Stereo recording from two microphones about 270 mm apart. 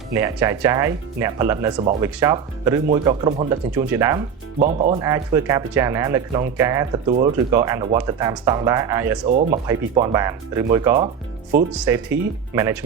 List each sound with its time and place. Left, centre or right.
0.1 s speech: centre
4.6 s speech: right
4.9 s speech: centre
9.3 s speech: right